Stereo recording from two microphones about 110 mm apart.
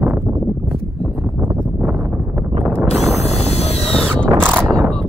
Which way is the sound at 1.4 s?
15° right (ahead or behind).